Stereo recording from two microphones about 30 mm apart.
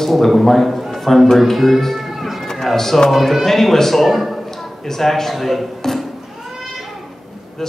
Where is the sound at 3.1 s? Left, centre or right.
Centre.